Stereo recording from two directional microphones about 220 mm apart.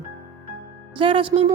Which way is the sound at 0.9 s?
25° right (ahead or behind).